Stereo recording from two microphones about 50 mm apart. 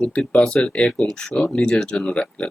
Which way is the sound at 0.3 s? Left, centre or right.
Centre.